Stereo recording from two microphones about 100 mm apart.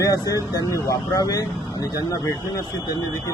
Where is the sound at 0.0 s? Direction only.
35° left (ahead or behind).